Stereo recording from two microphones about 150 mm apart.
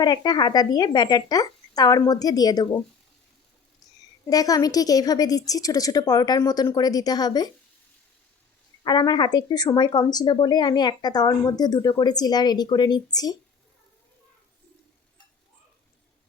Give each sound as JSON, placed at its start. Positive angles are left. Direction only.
{"t": 0.0, "sound": "speech", "side_deg": 30}
{"t": 4.3, "sound": "speech", "side_deg": 25}
{"t": 8.8, "sound": "speech", "side_deg": 30}